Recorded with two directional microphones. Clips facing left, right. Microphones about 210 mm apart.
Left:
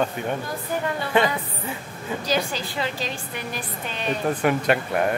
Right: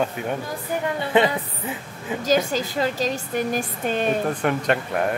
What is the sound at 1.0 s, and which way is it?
Speech, 20° right (ahead or behind).